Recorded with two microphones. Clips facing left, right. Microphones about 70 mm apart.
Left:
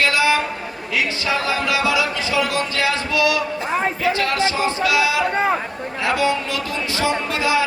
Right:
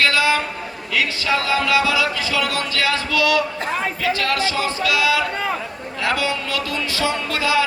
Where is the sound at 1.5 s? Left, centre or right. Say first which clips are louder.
Right 2 dB; left.